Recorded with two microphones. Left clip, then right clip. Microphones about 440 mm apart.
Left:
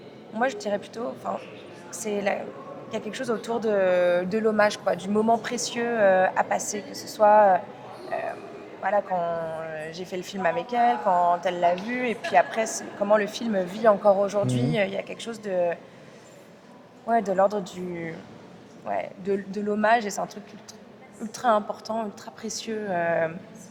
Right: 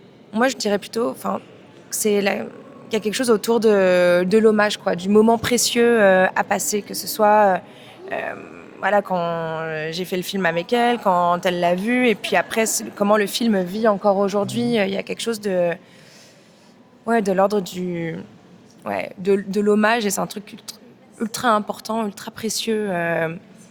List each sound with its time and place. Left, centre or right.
0.3 s speech: right
17.1 s speech: right